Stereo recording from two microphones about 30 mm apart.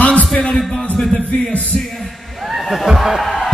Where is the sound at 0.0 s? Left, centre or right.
Left.